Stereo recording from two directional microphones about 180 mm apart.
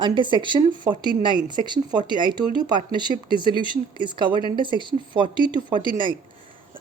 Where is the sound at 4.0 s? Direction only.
25° right (ahead or behind).